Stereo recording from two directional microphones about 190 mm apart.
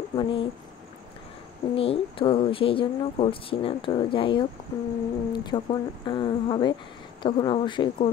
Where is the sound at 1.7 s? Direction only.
30° left (ahead or behind).